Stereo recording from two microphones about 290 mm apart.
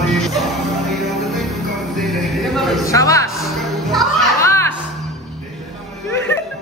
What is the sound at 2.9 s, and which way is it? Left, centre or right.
Music, centre.